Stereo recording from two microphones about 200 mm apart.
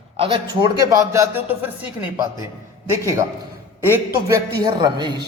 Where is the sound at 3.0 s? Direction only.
15° right (ahead or behind).